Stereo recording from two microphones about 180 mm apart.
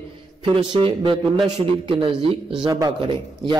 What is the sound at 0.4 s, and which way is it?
A man's voice, 30° right (ahead or behind).